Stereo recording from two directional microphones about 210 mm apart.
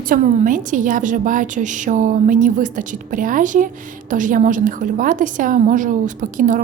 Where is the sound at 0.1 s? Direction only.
40° right (ahead or behind).